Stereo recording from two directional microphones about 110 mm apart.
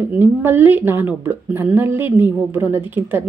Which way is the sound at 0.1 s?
20° right (ahead or behind).